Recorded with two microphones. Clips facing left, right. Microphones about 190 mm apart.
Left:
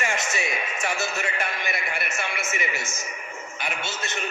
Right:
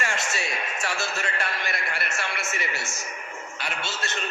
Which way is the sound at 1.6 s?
Centre (ahead or behind).